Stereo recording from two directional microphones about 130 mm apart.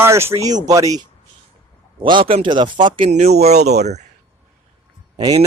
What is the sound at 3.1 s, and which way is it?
Speech, 55° right (ahead or behind).